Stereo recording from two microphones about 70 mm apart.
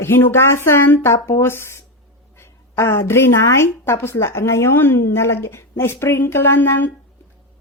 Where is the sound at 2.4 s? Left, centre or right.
Left.